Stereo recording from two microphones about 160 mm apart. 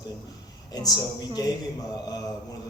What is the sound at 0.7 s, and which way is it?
A man's voice, 25° left (ahead or behind).